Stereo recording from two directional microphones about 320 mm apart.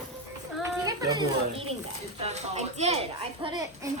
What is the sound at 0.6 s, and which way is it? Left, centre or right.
Children playing, centre.